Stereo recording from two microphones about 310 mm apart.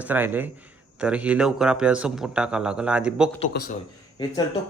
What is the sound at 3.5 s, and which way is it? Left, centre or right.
Speech, left.